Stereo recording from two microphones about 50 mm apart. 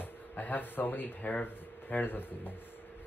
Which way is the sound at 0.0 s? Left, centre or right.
Left.